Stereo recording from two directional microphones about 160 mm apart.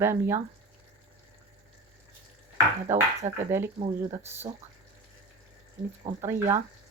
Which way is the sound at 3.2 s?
15° right (ahead or behind).